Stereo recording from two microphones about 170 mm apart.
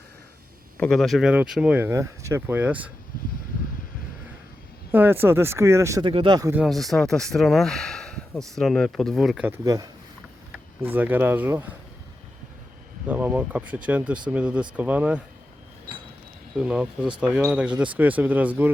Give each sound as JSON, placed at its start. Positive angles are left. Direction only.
{"t": 0.8, "sound": "speech", "side_deg": 0}
{"t": 4.9, "sound": "speech", "side_deg": -10}
{"t": 6.1, "sound": "speech", "side_deg": -30}
{"t": 6.5, "sound": "speech", "side_deg": -5}
{"t": 9.5, "sound": "speech", "side_deg": -20}
{"t": 10.5, "sound": "speech", "side_deg": -10}
{"t": 13.1, "sound": "speech", "side_deg": -10}
{"t": 16.6, "sound": "speech", "side_deg": -5}